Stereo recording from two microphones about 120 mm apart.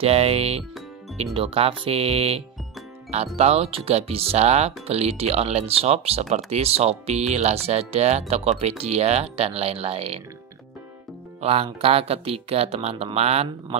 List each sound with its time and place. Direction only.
0.0 s speech: 55° right (ahead or behind)
11.4 s speech: 55° right (ahead or behind)